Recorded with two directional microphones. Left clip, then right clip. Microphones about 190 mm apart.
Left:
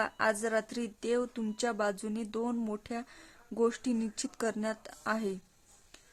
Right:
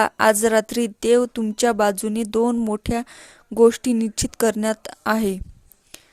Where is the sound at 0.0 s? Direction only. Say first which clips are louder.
Right 14 dB; 45° right (ahead or behind).